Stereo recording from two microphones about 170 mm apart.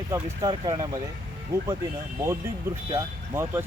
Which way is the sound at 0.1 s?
25° right (ahead or behind).